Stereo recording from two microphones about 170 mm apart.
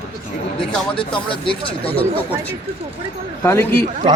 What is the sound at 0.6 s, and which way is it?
Speech, 5° left (ahead or behind).